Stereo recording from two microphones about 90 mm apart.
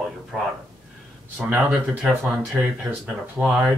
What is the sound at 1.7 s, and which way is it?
Speech, 5° right (ahead or behind).